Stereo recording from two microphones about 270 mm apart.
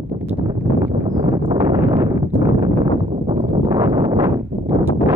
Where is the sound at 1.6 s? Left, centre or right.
Centre.